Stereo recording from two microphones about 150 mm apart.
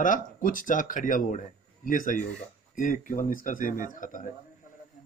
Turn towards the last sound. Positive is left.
turn(degrees=60)  # may be behind; listen again after turning